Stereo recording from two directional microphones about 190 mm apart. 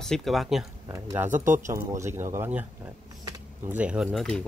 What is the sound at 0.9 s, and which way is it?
Speech, 15° right (ahead or behind).